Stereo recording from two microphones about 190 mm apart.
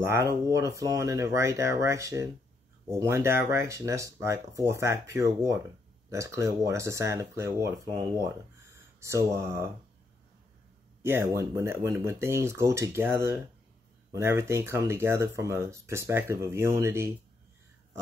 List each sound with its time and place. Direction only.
0.0 s speech: 15° right (ahead or behind)
9.0 s speech: 15° right (ahead or behind)
11.0 s speech: 15° right (ahead or behind)